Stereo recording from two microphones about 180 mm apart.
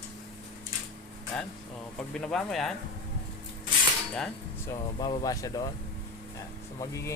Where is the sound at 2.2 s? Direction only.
Centre (ahead or behind).